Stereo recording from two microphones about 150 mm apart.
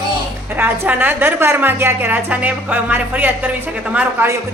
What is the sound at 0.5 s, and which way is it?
A woman's voice, 10° right (ahead or behind).